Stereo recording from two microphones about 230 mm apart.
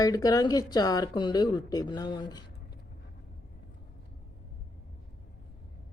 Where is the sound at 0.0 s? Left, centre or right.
Centre.